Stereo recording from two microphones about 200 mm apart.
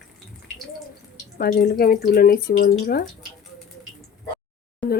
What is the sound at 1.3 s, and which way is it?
Speech, 50° left (ahead or behind).